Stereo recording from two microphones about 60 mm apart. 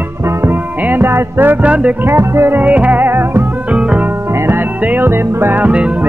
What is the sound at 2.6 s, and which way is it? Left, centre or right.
Music, right.